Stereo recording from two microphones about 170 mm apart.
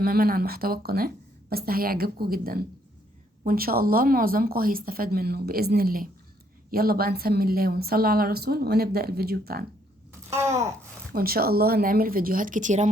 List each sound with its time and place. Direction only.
0.0 s a woman's voice: 60° right (ahead or behind)
10.2 s wail: 15° right (ahead or behind)
11.1 s a woman's voice: 60° right (ahead or behind); by 12.9 s 45° right (ahead or behind)